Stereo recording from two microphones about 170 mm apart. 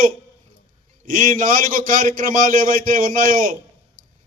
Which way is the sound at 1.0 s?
55° right (ahead or behind).